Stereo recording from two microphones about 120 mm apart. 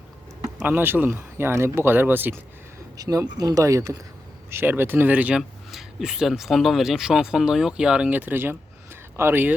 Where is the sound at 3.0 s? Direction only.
30° right (ahead or behind).